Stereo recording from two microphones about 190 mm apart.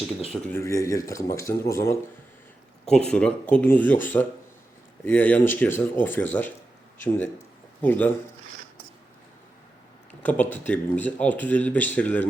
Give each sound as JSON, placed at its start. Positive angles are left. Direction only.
{"t": 0.3, "sound": "speech", "side_deg": 10}
{"t": 2.9, "sound": "speech", "side_deg": 5}
{"t": 7.8, "sound": "speech", "side_deg": 10}
{"t": 10.2, "sound": "speech", "side_deg": 10}